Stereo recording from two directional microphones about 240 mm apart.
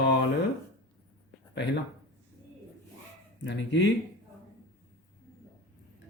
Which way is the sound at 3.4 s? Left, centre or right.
Left.